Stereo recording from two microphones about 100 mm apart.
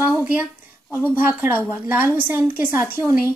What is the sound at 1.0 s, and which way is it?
Speech, 15° right (ahead or behind).